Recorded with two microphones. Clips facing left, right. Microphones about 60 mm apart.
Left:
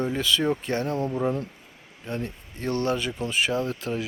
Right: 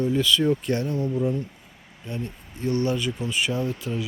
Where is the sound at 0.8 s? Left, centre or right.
Left.